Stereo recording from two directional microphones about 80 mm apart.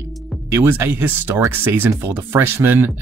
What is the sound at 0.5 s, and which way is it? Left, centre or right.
Speech, right.